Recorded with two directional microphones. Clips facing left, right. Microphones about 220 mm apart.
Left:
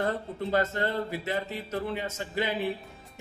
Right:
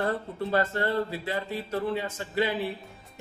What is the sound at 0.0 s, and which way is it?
A man's voice, 20° left (ahead or behind).